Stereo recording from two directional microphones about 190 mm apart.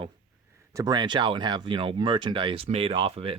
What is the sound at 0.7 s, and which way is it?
Speech, 20° right (ahead or behind).